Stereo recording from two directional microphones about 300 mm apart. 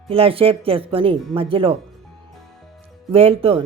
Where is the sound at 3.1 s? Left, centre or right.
Centre.